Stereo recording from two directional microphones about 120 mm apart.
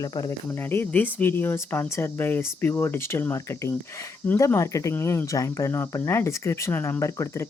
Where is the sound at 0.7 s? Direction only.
15° left (ahead or behind).